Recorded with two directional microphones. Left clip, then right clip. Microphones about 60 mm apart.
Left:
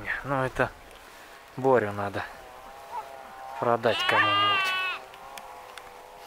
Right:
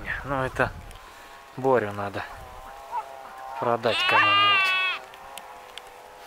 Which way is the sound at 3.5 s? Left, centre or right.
Centre.